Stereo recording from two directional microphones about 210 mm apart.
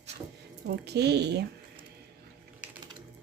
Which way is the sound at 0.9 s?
50° right (ahead or behind).